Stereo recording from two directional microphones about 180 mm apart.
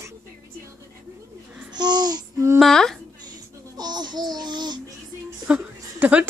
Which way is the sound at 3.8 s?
25° right (ahead or behind).